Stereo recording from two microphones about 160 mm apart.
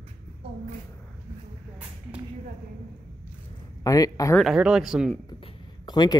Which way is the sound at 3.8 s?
20° left (ahead or behind).